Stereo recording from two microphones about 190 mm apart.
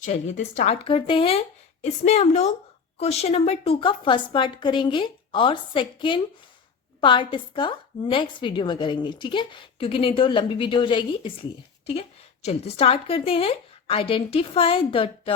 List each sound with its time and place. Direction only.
0.0 s a woman's voice: 40° left (ahead or behind)